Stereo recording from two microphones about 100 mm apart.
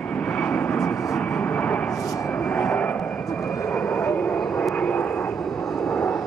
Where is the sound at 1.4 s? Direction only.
15° left (ahead or behind).